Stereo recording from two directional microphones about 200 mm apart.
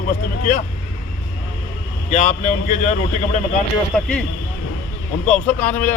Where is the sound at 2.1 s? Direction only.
35° left (ahead or behind).